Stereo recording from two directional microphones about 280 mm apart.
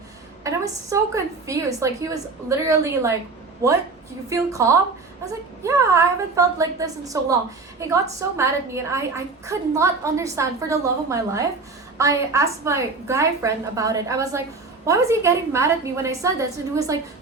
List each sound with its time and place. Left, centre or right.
0.4 s a woman's voice: centre